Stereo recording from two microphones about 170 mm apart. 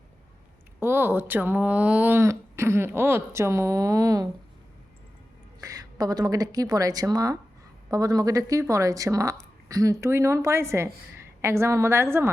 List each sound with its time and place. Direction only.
0.8 s speech: 15° right (ahead or behind)
5.5 s a woman's voice: 20° right (ahead or behind)